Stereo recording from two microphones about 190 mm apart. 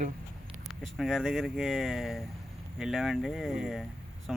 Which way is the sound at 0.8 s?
Centre (ahead or behind).